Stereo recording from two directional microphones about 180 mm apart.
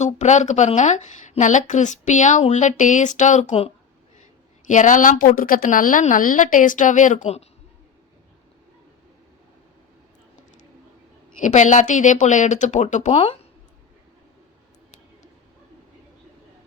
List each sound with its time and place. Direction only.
0.0 s speech: 40° left (ahead or behind)
11.3 s speech: 45° left (ahead or behind)